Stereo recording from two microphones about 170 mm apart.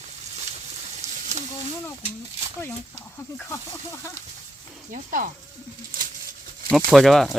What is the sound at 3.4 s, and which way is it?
Snake, 15° left (ahead or behind).